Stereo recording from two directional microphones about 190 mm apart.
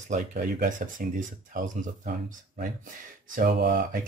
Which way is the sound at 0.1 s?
45° right (ahead or behind).